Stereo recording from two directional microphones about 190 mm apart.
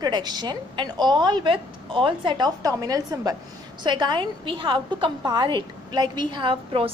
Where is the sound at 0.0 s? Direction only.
20° right (ahead or behind).